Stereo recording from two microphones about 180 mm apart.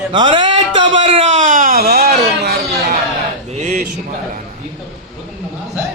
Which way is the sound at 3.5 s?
40° right (ahead or behind).